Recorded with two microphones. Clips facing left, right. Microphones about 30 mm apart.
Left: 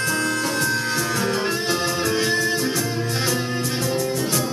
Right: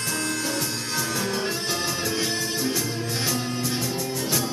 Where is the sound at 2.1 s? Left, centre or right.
Centre.